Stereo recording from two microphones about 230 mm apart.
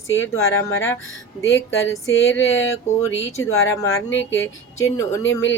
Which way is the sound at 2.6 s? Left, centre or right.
Left.